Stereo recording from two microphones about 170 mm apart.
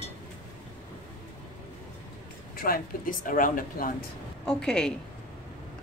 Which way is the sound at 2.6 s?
60° left (ahead or behind).